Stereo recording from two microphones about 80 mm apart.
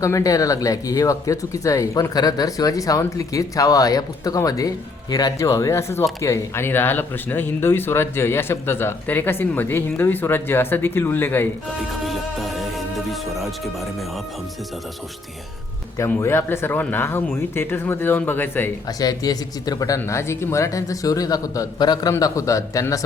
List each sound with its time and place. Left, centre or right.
0.0 s speech: left
12.0 s music: centre
16.0 s speech: left
18.9 s speech: left
22.2 s speech: left